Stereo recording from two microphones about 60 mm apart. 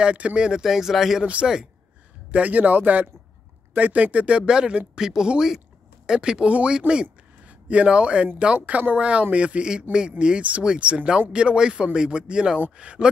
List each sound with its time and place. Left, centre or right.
0.0 s speech: centre
1.2 s speech: centre
2.3 s speech: right
8.5 s speech: right